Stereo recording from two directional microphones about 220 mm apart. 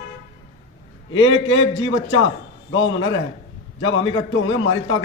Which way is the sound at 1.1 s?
60° left (ahead or behind).